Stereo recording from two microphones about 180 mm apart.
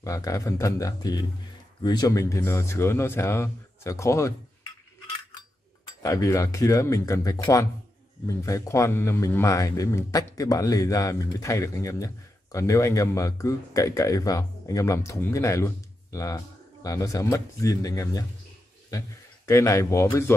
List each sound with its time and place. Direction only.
0.0 s speech: 20° left (ahead or behind)
6.0 s speech: 20° left (ahead or behind)